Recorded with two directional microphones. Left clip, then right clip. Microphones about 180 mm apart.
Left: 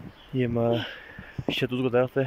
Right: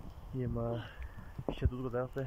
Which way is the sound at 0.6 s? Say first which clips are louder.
Left 14 dB; 45° left (ahead or behind).